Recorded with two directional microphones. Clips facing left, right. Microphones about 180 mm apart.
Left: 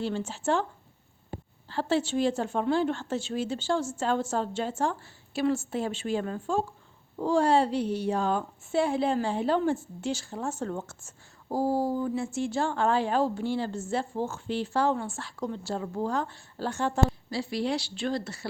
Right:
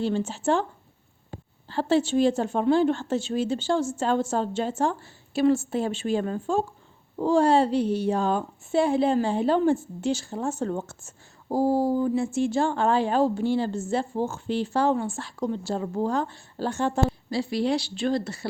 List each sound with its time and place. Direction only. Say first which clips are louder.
0.0 s speech: right 5 dB; 25° right (ahead or behind)
1.7 s speech: right 5 dB; 30° right (ahead or behind)